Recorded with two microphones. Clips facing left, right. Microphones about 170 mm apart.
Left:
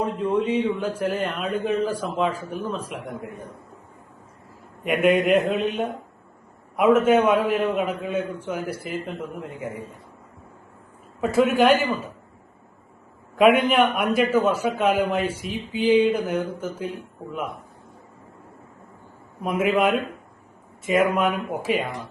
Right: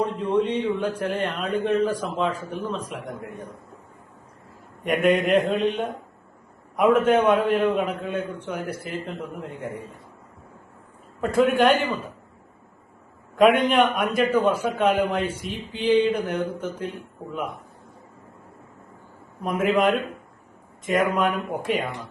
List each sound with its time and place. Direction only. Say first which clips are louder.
0.0 s a man's voice: even; 5° left (ahead or behind)
4.8 s a man's voice: left 1 dB; 5° left (ahead or behind)
11.2 s a man's voice: left 1 dB; 5° left (ahead or behind)
13.3 s a man's voice: even; 5° left (ahead or behind)
19.4 s a man's voice: even; 5° left (ahead or behind)